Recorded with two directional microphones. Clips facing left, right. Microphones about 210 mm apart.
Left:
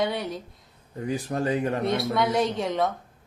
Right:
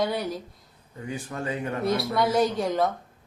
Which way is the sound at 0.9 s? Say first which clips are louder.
Left 6 dB; 35° left (ahead or behind).